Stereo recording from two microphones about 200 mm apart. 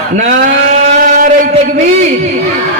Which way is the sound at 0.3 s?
40° right (ahead or behind).